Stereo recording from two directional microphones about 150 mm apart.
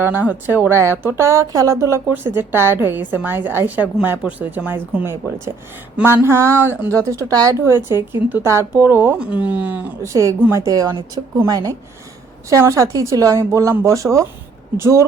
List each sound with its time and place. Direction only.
0.0 s a woman's voice: 10° right (ahead or behind)